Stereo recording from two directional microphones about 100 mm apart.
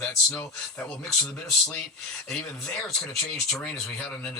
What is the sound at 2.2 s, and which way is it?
Speech, 5° left (ahead or behind).